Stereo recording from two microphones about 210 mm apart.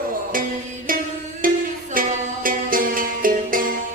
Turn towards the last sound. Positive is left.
turn(degrees=-40)  # may be behind; listen again after turning